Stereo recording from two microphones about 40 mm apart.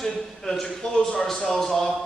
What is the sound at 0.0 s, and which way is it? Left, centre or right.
A man's voice, centre.